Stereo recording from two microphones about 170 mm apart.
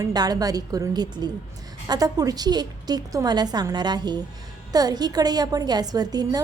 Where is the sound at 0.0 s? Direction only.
25° right (ahead or behind).